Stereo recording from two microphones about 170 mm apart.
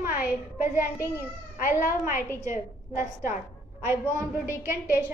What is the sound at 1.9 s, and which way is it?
Speech, 55° left (ahead or behind).